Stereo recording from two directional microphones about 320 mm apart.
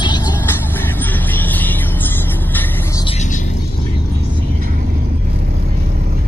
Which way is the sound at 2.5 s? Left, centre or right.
Centre.